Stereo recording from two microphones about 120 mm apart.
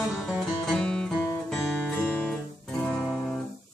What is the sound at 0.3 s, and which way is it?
Music, 5° left (ahead or behind).